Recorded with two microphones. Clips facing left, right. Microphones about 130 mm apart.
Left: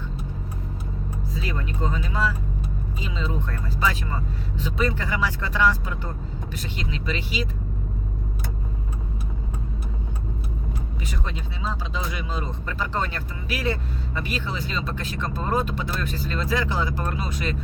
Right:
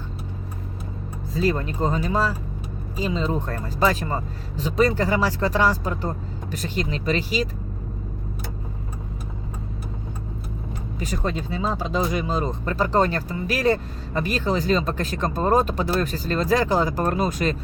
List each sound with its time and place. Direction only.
1.4 s speech: 40° right (ahead or behind)
11.0 s speech: 40° right (ahead or behind)